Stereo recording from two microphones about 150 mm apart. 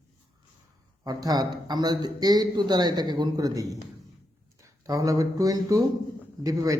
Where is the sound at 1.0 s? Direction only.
25° right (ahead or behind).